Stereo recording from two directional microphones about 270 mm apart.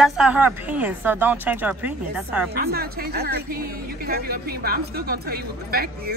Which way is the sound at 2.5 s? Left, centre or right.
Right.